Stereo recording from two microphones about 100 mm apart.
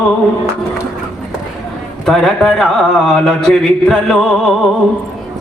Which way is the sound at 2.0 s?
5° left (ahead or behind).